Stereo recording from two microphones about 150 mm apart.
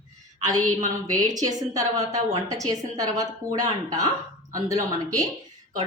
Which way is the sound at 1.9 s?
50° right (ahead or behind).